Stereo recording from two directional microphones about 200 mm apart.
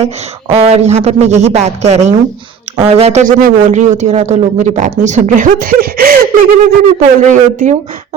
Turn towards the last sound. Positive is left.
turn(degrees=-40)  # may be behind; listen again after turning